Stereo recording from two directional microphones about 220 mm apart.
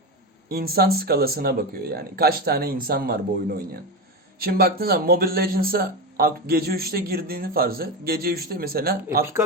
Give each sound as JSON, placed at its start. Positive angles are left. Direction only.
{"t": 0.4, "sound": "speech", "side_deg": -45}
{"t": 4.4, "sound": "speech", "side_deg": -45}